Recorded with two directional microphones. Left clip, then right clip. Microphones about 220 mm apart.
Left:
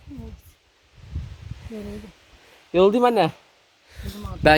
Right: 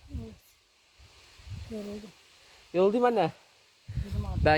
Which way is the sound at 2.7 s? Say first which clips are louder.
Left 7 dB; 45° left (ahead or behind).